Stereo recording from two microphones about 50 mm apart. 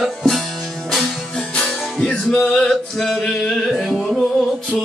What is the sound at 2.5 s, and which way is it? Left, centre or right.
Male singing, centre.